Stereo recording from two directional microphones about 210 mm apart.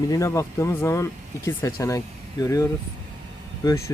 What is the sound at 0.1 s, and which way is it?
Speech, 15° left (ahead or behind).